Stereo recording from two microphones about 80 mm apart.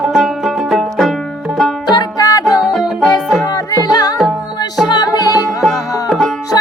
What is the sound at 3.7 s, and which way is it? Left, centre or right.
Music, left.